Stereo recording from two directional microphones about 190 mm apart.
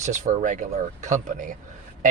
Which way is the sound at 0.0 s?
40° right (ahead or behind).